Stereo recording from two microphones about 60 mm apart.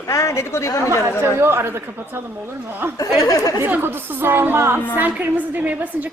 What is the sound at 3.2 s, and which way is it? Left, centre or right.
Speech, left.